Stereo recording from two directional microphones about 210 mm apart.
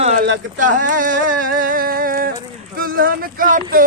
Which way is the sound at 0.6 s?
40° right (ahead or behind).